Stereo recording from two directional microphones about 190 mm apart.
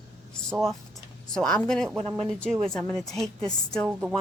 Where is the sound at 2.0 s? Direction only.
30° right (ahead or behind).